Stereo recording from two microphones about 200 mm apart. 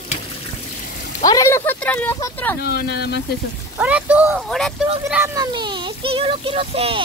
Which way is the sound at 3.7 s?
5° right (ahead or behind).